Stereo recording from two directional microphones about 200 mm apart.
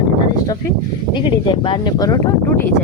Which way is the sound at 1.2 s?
25° left (ahead or behind).